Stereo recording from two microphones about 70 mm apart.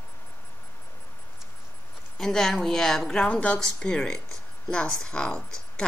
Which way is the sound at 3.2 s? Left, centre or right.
Centre.